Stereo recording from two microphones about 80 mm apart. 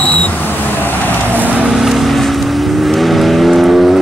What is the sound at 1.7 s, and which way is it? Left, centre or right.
Vehicle, centre.